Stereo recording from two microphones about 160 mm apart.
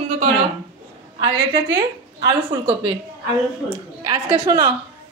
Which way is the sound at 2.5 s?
25° right (ahead or behind).